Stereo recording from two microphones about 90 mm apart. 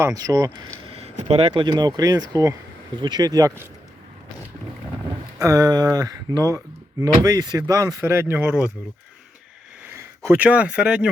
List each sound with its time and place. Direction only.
0.0 s speech: 40° right (ahead or behind)
0.9 s speech: 90° right; by 2.6 s 45° right (ahead or behind)
2.9 s speech: 60° right (ahead or behind)
5.4 s speech: 40° right (ahead or behind); by 8.7 s 20° right (ahead or behind)
9.8 s a sound: 30° right (ahead or behind)
10.3 s speech: 15° right (ahead or behind)